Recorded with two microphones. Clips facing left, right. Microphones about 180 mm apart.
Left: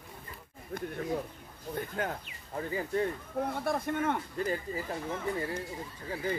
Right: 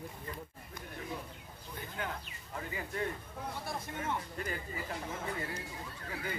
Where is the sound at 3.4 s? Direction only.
55° left (ahead or behind).